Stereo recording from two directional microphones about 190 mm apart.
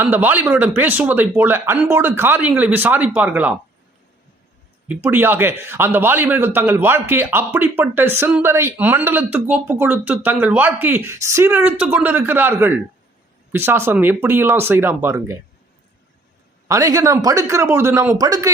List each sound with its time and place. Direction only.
0.0 s a man's voice: 10° right (ahead or behind)
5.0 s a man's voice: 10° right (ahead or behind)
16.6 s a man's voice: 15° right (ahead or behind)